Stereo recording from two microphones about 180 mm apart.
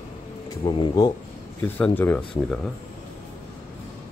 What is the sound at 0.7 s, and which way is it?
Speech, 25° left (ahead or behind).